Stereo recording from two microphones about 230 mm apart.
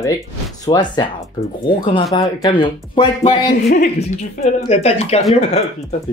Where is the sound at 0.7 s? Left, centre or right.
Centre.